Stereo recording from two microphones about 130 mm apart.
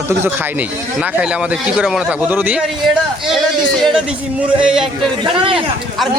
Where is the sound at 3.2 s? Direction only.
Centre (ahead or behind).